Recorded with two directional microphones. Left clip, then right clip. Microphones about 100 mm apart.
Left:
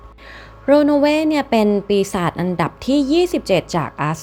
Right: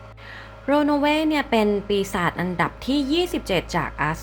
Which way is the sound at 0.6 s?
40° left (ahead or behind).